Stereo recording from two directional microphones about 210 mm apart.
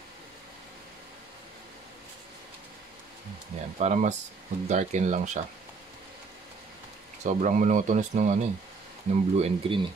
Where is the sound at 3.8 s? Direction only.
35° right (ahead or behind).